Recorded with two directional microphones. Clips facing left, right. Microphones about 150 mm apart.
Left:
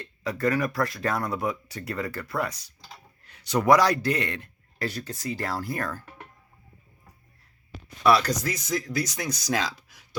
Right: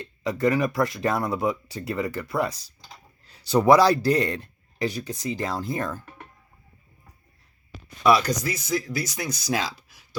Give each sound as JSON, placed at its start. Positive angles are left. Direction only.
{"t": 0.0, "sound": "speech", "side_deg": -20}
{"t": 4.8, "sound": "speech", "side_deg": -15}
{"t": 8.0, "sound": "speech", "side_deg": -10}